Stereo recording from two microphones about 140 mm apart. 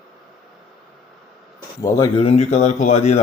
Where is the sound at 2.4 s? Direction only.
55° left (ahead or behind).